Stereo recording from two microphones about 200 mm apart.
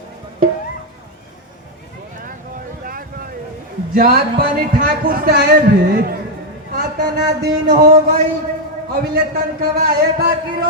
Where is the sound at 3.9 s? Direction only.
50° right (ahead or behind).